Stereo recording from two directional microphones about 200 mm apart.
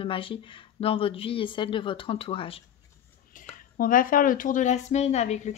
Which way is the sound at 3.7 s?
45° left (ahead or behind).